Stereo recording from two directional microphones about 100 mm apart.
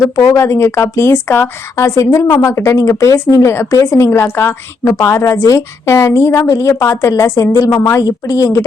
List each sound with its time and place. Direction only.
0.2 s a woman's voice: 30° left (ahead or behind)